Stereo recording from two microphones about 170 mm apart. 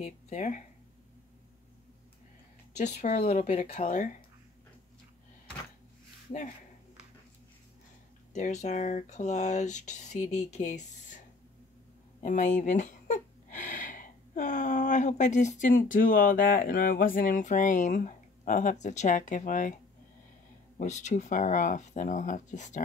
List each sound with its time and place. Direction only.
0.0 s speech: 45° left (ahead or behind)
2.8 s speech: 45° left (ahead or behind)
8.3 s speech: 45° left (ahead or behind)
12.2 s speech: 45° left (ahead or behind)
20.7 s speech: 45° left (ahead or behind)